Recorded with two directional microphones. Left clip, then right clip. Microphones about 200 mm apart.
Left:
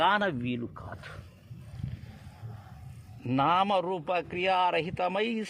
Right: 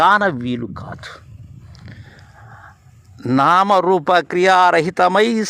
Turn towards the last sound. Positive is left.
turn(degrees=-35)  # may be behind; listen again after turning